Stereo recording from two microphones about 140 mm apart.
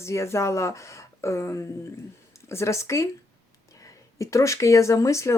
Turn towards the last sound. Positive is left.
turn(degrees=20)  # may be behind; listen again after turning